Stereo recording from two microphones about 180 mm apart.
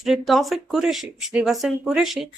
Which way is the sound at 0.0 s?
Centre (ahead or behind).